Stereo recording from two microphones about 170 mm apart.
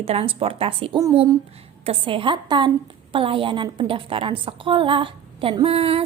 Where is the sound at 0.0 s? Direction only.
35° right (ahead or behind).